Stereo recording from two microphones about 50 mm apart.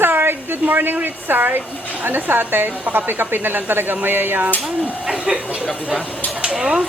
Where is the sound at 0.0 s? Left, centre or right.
Right.